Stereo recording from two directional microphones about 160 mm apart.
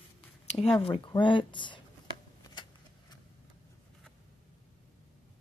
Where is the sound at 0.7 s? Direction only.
35° left (ahead or behind).